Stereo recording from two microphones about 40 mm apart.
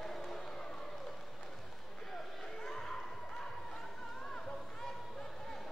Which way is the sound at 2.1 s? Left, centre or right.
Centre.